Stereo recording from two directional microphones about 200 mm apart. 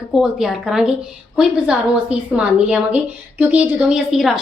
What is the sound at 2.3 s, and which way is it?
A woman's voice, 5° right (ahead or behind).